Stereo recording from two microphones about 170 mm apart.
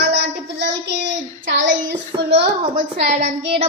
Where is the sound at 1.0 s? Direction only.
90° right.